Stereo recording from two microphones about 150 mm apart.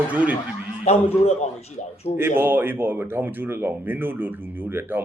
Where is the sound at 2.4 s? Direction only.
15° right (ahead or behind).